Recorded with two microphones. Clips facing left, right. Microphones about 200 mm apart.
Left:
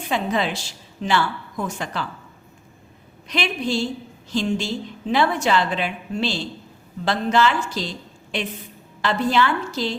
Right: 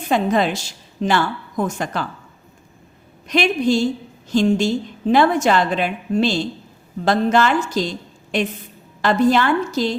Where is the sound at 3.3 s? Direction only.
45° right (ahead or behind).